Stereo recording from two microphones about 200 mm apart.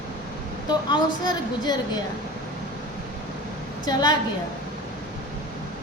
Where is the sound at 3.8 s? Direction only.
20° left (ahead or behind).